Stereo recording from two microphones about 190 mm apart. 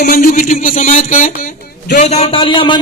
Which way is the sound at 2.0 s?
35° left (ahead or behind).